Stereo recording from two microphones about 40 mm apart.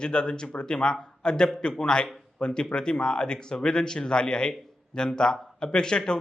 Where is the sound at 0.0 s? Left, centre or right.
Left.